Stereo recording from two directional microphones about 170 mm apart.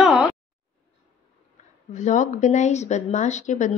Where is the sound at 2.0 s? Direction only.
45° left (ahead or behind).